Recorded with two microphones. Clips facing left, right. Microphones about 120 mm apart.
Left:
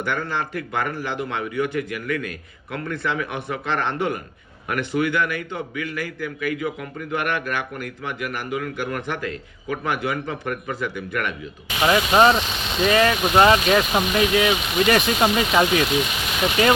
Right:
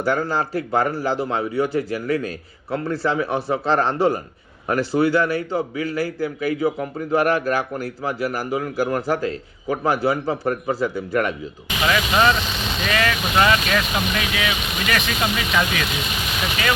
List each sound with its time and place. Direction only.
0.0 s a man's voice: 35° right (ahead or behind)
11.9 s speech: 30° left (ahead or behind)